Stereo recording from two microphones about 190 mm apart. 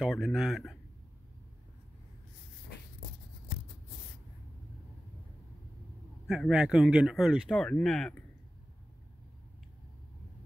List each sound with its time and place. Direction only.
0.0 s speech: centre (ahead or behind)
6.2 s speech: centre (ahead or behind)